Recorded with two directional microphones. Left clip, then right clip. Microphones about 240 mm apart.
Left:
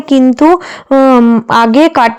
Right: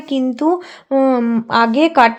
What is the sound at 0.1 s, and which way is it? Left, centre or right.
Speech, left.